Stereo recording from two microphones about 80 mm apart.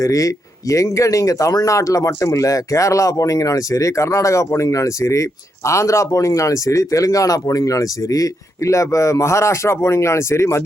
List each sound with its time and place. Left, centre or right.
0.0 s speech: left